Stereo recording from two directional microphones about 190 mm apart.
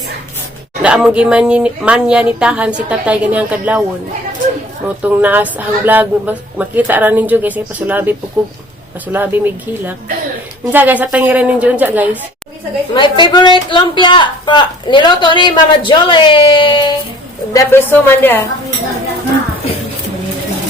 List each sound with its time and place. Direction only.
0.8 s a woman's voice: 5° right (ahead or behind)
5.0 s a woman's voice: 10° right (ahead or behind)
12.9 s a woman's voice: 25° left (ahead or behind)
17.5 s a woman's voice: 15° left (ahead or behind)